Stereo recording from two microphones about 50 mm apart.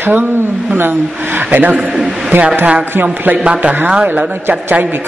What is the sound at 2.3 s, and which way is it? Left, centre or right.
Speech, right.